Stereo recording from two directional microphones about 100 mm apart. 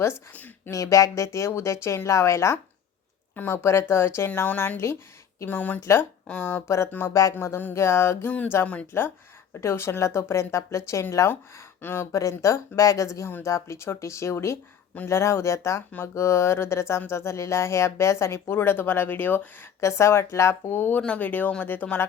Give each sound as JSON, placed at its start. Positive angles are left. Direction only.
{"t": 0.3, "sound": "a sound", "side_deg": 15}
{"t": 0.7, "sound": "speech", "side_deg": 30}
{"t": 6.2, "sound": "speech", "side_deg": 15}
{"t": 6.7, "sound": "speech", "side_deg": 30}
{"t": 7.3, "sound": "speech", "side_deg": 20}